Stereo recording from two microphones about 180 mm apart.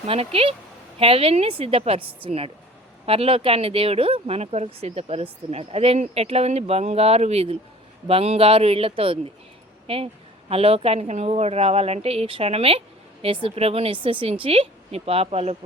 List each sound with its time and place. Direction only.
0.1 s speech: 35° right (ahead or behind)